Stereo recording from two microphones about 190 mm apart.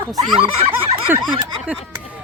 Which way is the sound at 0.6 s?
30° right (ahead or behind).